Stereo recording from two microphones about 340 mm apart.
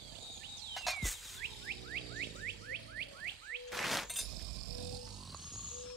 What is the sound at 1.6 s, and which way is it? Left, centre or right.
Vehicle, right.